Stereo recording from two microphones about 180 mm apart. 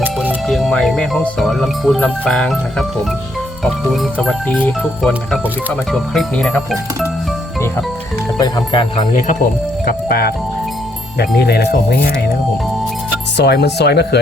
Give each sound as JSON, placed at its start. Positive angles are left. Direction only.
{"t": 0.0, "sound": "music", "side_deg": -10}
{"t": 0.4, "sound": "speech", "side_deg": 0}
{"t": 8.4, "sound": "speech", "side_deg": 25}
{"t": 9.1, "sound": "speech", "side_deg": 45}
{"t": 11.3, "sound": "speech", "side_deg": 65}
{"t": 13.3, "sound": "speech", "side_deg": 65}